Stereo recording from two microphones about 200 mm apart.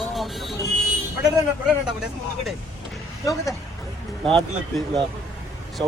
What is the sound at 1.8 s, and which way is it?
Speech, centre (ahead or behind).